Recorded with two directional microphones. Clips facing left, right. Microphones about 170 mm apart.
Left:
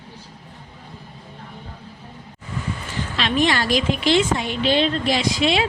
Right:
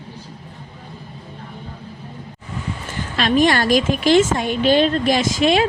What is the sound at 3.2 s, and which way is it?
A woman's voice, 45° right (ahead or behind).